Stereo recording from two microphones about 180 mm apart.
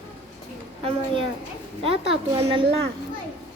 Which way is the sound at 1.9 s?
30° right (ahead or behind).